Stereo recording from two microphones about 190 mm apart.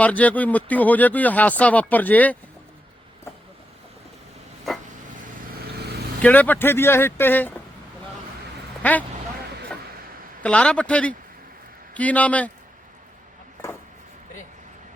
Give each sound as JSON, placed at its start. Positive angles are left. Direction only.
{"t": 0.0, "sound": "speech", "side_deg": 10}
{"t": 5.2, "sound": "vehicle", "side_deg": -55}
{"t": 6.2, "sound": "speech", "side_deg": 10}
{"t": 8.8, "sound": "speech", "side_deg": 10}
{"t": 10.4, "sound": "a man's voice", "side_deg": 5}